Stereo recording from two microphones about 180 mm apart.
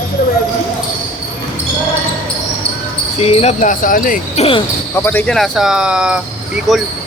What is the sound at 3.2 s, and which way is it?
Basketball bounce, 35° left (ahead or behind).